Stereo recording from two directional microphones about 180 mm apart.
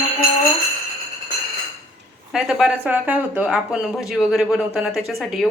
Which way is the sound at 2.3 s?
5° right (ahead or behind).